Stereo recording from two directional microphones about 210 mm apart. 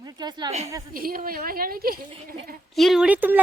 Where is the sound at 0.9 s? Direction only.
45° right (ahead or behind).